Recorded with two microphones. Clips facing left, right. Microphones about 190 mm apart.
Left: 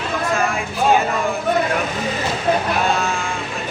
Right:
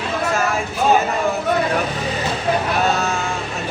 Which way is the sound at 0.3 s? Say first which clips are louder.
Right 1 dB; 45° right (ahead or behind).